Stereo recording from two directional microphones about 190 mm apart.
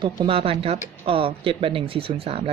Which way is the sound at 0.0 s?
25° right (ahead or behind).